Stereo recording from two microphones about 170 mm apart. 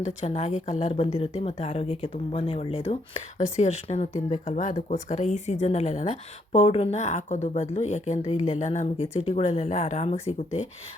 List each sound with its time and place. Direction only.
0.0 s speech: 40° left (ahead or behind)